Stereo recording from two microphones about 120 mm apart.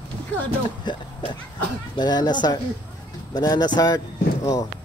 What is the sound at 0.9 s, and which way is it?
Speech, 40° left (ahead or behind).